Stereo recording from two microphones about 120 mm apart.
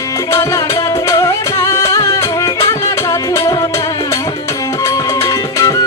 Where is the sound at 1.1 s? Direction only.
25° left (ahead or behind).